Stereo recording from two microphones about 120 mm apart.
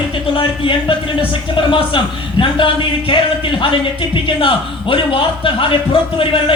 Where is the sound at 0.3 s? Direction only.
45° left (ahead or behind).